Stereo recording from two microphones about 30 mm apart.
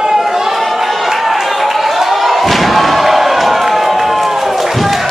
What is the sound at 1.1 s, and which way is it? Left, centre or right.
Crowd, centre.